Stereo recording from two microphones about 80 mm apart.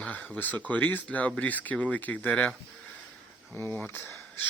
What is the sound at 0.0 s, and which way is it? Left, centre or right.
Speech, centre.